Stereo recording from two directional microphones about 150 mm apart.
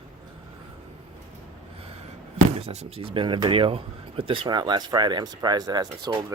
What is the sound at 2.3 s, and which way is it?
Speech, 45° right (ahead or behind).